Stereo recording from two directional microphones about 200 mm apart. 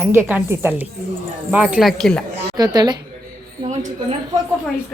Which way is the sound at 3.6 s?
35° right (ahead or behind).